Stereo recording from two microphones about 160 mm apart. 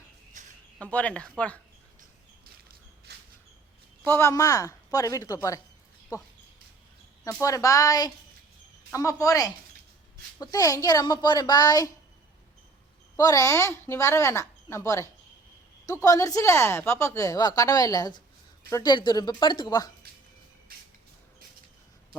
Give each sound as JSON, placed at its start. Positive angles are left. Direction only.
{"t": 0.4, "sound": "a sound", "side_deg": -50}
{"t": 0.8, "sound": "speech", "side_deg": 10}
{"t": 2.6, "sound": "a sound", "side_deg": -85}
{"t": 4.0, "sound": "speech", "side_deg": 15}
{"t": 13.1, "sound": "speech", "side_deg": 20}
{"t": 20.7, "sound": "vehicle", "side_deg": -65}